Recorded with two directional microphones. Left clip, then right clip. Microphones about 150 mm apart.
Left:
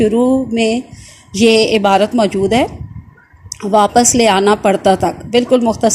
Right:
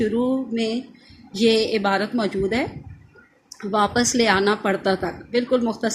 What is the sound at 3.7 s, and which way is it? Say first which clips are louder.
A woman's voice: left 10 dB; 40° left (ahead or behind).